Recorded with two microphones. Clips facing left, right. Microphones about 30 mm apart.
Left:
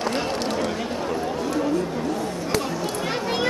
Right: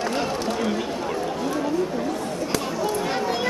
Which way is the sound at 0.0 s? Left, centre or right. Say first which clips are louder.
Even; centre.